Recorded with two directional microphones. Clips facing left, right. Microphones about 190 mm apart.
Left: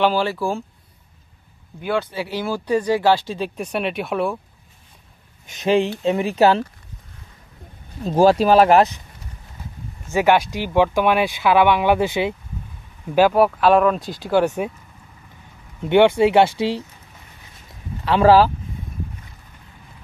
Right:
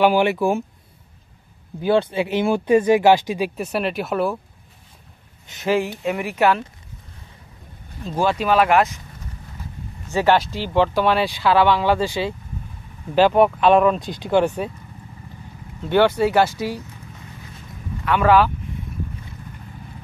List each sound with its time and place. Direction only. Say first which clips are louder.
0.0 s speech: right 3 dB; 15° right (ahead or behind)
1.8 s speech: right 5 dB; 30° right (ahead or behind); by 4.4 s centre (ahead or behind)
5.5 s speech: left 3 dB; 20° left (ahead or behind)
8.0 s speech: left 7 dB; 35° left (ahead or behind)
10.1 s speech: left 1 dB; 15° left (ahead or behind)
13.1 s speech: even; 5° left (ahead or behind)
15.8 s speech: left 3 dB; 20° left (ahead or behind)
18.0 s speech: left 3 dB; 30° left (ahead or behind)